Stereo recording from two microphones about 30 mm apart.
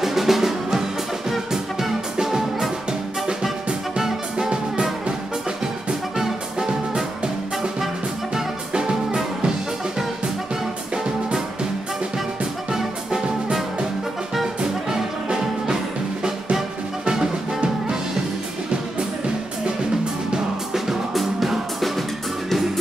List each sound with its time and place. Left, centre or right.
0.0 s music: centre
4.4 s music: right
6.1 s music: centre
8.7 s music: right
12.7 s music: centre
15.3 s music: centre
21.1 s music: centre